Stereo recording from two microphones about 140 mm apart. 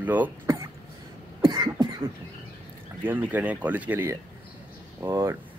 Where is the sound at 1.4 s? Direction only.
35° right (ahead or behind).